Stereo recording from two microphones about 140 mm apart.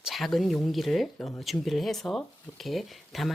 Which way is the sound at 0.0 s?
Centre (ahead or behind).